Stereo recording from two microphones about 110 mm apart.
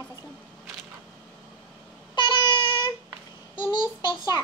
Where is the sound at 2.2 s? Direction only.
45° left (ahead or behind).